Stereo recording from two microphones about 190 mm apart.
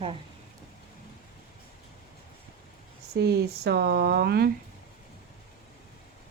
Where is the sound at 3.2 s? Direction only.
60° right (ahead or behind).